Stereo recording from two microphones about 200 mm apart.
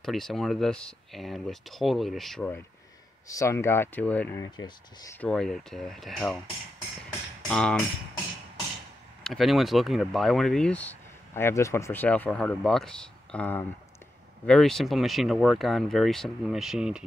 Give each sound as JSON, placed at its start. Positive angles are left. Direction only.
{"t": 0.0, "sound": "speech", "side_deg": 0}
{"t": 4.6, "sound": "speech", "side_deg": 20}
{"t": 5.1, "sound": "speech", "side_deg": 5}
{"t": 7.4, "sound": "speech", "side_deg": 5}
{"t": 9.2, "sound": "speech", "side_deg": 0}